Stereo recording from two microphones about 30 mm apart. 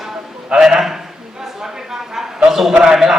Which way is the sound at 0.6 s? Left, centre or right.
Centre.